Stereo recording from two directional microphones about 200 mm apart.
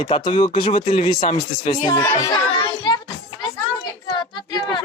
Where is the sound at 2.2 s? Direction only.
20° left (ahead or behind).